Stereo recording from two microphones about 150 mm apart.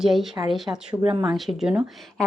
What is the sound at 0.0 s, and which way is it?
Speech, centre (ahead or behind).